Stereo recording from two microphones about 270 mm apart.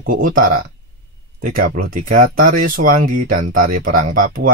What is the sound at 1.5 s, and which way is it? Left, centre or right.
Speech, right.